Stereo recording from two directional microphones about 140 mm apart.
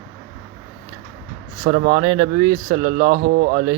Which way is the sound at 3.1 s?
90° right.